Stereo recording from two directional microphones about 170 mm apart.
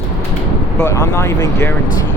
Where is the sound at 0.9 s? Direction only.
20° left (ahead or behind).